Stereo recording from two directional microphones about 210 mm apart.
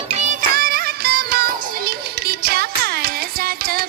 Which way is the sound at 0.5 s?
45° right (ahead or behind).